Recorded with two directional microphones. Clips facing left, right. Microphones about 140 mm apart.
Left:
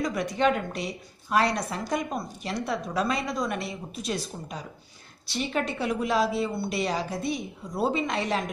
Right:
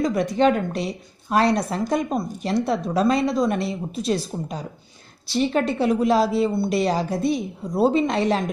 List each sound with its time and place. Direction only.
0.0 s speech: 30° right (ahead or behind)